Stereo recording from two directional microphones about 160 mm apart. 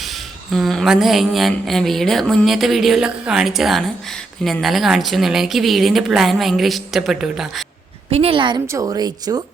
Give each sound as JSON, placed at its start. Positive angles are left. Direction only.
{"t": 0.5, "sound": "speech", "side_deg": 0}
{"t": 8.1, "sound": "a woman's voice", "side_deg": -35}
{"t": 8.6, "sound": "speech", "side_deg": -20}